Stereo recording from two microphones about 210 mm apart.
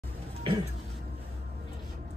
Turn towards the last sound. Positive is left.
turn(degrees=-25)  # may be behind; listen again after turning